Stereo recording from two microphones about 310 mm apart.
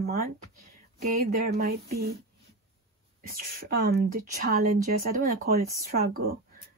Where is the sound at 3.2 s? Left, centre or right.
Right.